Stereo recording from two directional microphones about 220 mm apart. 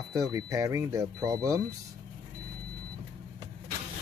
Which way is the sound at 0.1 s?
15° right (ahead or behind).